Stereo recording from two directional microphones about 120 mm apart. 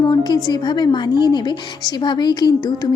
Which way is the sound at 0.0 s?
35° left (ahead or behind).